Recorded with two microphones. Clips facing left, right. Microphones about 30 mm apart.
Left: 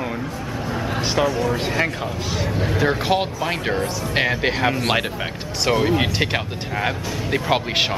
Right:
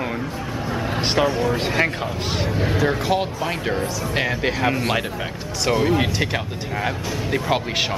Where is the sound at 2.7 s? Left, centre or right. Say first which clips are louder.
Left 2 dB; centre.